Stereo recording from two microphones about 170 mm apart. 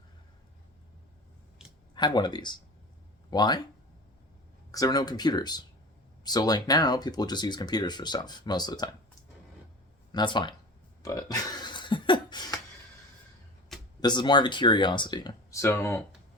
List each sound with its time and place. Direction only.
2.0 s speech: 25° left (ahead or behind)
4.7 s speech: 20° left (ahead or behind)
10.1 s speech: 25° left (ahead or behind)
11.0 s a sound: 20° left (ahead or behind)
14.0 s speech: 25° left (ahead or behind)